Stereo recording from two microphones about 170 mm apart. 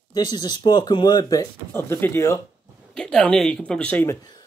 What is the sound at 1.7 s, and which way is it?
Speech, 15° left (ahead or behind).